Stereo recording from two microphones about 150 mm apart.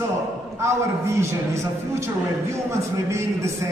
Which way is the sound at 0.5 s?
20° right (ahead or behind).